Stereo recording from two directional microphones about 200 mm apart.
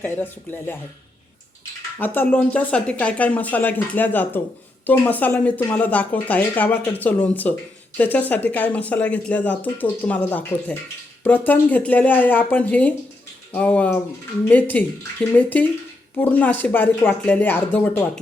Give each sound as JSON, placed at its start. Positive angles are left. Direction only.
{"t": 0.0, "sound": "speech", "side_deg": 10}
{"t": 2.0, "sound": "speech", "side_deg": 10}